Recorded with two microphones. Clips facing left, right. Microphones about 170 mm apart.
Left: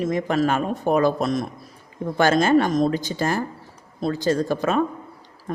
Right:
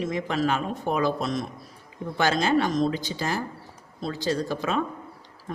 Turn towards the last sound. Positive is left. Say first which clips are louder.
# left 5 dB
turn(degrees=50)  # may be behind; listen again after turning